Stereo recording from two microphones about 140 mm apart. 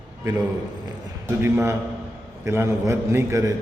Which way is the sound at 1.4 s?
15° right (ahead or behind).